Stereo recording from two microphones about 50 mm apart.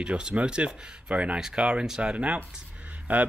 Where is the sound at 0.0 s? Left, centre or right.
Centre.